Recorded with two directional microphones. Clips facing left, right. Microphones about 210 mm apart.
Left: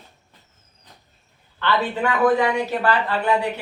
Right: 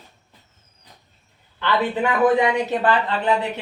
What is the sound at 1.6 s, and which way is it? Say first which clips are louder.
Speech: right 1 dB; 15° right (ahead or behind).